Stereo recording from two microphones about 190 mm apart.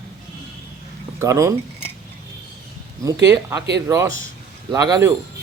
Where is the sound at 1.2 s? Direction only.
15° right (ahead or behind).